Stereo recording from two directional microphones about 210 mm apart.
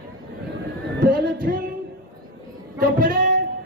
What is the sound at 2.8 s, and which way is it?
Music, 40° right (ahead or behind).